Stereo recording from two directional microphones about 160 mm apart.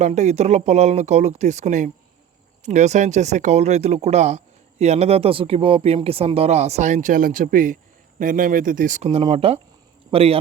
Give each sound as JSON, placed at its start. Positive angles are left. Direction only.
{"t": 0.0, "sound": "speech", "side_deg": -45}
{"t": 9.0, "sound": "a man's voice", "side_deg": -40}